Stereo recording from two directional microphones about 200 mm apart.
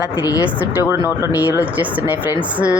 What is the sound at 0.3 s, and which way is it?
Speech, 15° left (ahead or behind).